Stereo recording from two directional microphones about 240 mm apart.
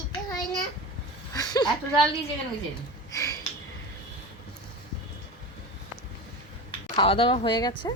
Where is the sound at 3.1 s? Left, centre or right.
Centre.